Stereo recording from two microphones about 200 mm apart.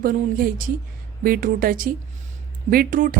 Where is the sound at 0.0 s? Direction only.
45° right (ahead or behind).